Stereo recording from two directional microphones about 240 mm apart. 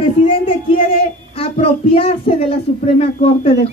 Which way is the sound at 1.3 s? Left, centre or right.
Left.